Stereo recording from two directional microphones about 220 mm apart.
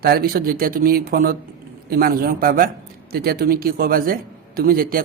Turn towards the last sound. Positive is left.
turn(degrees=-40)  # may be behind; listen again after turning